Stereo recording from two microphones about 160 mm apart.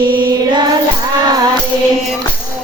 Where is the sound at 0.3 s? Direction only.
25° right (ahead or behind).